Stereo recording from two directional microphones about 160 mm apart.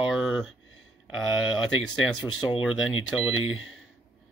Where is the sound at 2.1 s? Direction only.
30° left (ahead or behind).